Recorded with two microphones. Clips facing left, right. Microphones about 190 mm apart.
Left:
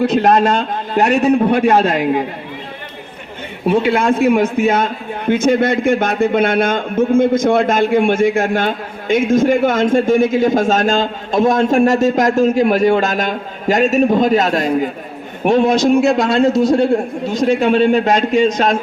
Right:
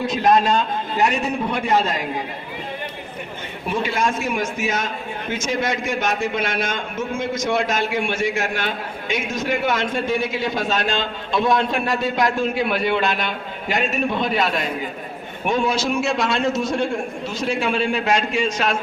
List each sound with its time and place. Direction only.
0.0 s a man's voice: 70° left (ahead or behind)
3.7 s a man's voice: 60° left (ahead or behind); by 18.8 s 35° left (ahead or behind)